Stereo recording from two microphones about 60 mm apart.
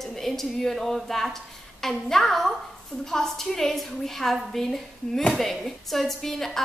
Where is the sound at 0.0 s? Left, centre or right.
Centre.